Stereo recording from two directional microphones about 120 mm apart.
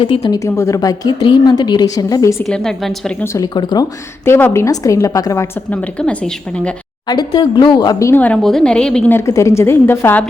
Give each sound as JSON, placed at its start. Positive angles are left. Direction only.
{"t": 0.0, "sound": "speech", "side_deg": 50}
{"t": 0.3, "sound": "a woman's voice", "side_deg": 25}
{"t": 2.5, "sound": "a woman's voice", "side_deg": 5}
{"t": 3.3, "sound": "a woman's voice", "side_deg": 35}
{"t": 4.3, "sound": "a woman's voice", "side_deg": 20}
{"t": 5.7, "sound": "a woman's voice", "side_deg": 10}
{"t": 7.1, "sound": "a woman's voice", "side_deg": 35}
{"t": 8.2, "sound": "a woman's voice", "side_deg": 5}
{"t": 9.1, "sound": "speech", "side_deg": 25}